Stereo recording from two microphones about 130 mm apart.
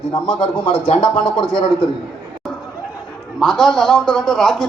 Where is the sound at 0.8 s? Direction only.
40° left (ahead or behind).